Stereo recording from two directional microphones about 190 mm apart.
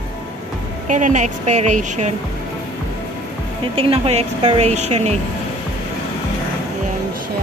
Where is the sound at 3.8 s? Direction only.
30° right (ahead or behind).